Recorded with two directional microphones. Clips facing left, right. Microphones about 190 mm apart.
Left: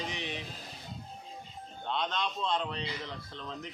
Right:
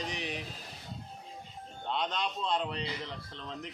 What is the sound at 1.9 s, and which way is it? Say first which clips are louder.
A man's voice: even; 5° right (ahead or behind).